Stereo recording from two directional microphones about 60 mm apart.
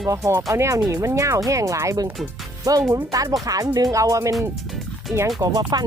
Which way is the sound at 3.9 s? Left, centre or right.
Right.